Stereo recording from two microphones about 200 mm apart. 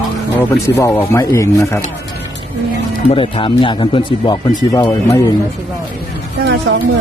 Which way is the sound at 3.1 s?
25° left (ahead or behind).